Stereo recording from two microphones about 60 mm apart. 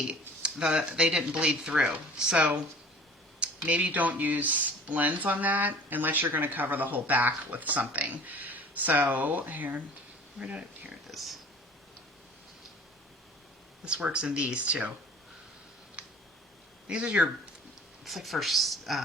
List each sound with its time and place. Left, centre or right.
0.1 s speech: centre
3.8 s speech: right
10.4 s speech: centre
11.1 s speech: centre
13.8 s speech: centre
16.8 s speech: centre
18.0 s speech: centre